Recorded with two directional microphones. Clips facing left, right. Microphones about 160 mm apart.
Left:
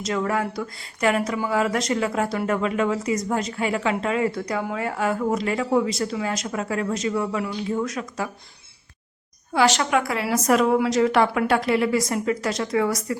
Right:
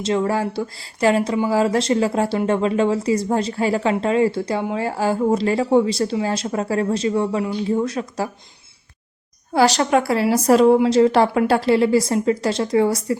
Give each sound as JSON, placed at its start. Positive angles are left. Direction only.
{"t": 0.0, "sound": "speech", "side_deg": -25}
{"t": 9.5, "sound": "speech", "side_deg": -35}